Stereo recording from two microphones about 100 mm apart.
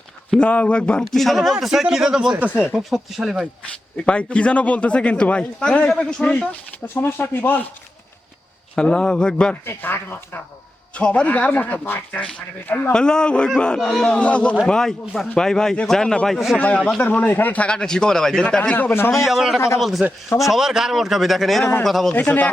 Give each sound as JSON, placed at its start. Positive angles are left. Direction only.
{"t": 0.3, "sound": "a man's voice", "side_deg": 10}
{"t": 2.5, "sound": "speech", "side_deg": 20}
{"t": 2.7, "sound": "a man's voice", "side_deg": -5}
{"t": 3.6, "sound": "a man's voice", "side_deg": 10}
{"t": 8.7, "sound": "a man's voice", "side_deg": 10}
{"t": 9.6, "sound": "a man's voice", "side_deg": 20}
{"t": 16.6, "sound": "a man's voice", "side_deg": 15}
{"t": 18.9, "sound": "speech", "side_deg": 25}
{"t": 19.2, "sound": "a man's voice", "side_deg": -5}
{"t": 19.5, "sound": "speech", "side_deg": 25}
{"t": 19.8, "sound": "a man's voice", "side_deg": 0}
{"t": 22.1, "sound": "a man's voice", "side_deg": 15}